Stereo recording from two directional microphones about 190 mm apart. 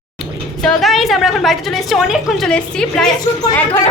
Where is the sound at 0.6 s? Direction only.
Centre (ahead or behind).